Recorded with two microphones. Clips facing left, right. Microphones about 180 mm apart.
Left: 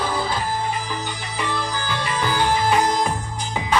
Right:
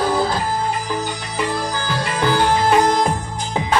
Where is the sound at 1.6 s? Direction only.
45° right (ahead or behind).